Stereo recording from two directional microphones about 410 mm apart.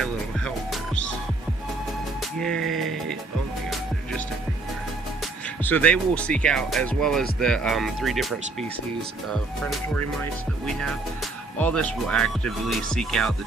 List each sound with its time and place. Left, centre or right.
0.0 s music: centre
2.4 s music: centre
5.2 s speech: centre